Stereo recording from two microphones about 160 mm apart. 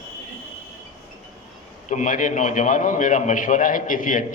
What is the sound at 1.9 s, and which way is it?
A man's voice, 50° left (ahead or behind).